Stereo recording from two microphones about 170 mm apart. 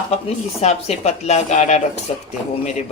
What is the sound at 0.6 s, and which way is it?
Speech, 40° left (ahead or behind).